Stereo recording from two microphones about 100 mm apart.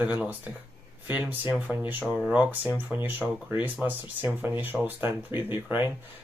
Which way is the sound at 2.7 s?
15° right (ahead or behind).